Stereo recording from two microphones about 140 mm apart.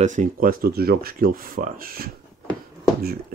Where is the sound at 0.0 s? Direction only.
65° right (ahead or behind).